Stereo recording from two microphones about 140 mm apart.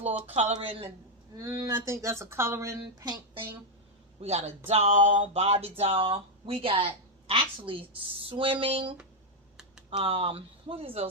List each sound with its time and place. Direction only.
0.3 s speech: 55° right (ahead or behind)
1.4 s speech: 25° right (ahead or behind)
4.2 s speech: 50° right (ahead or behind)
10.0 s speech: 40° right (ahead or behind)